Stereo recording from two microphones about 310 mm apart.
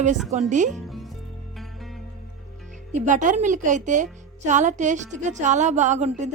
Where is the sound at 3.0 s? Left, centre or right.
Right.